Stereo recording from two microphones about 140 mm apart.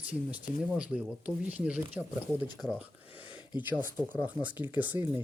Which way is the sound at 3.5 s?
15° right (ahead or behind).